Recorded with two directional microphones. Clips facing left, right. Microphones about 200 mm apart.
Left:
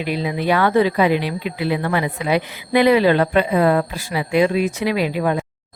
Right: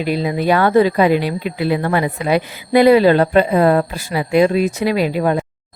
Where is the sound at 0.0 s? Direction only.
40° right (ahead or behind).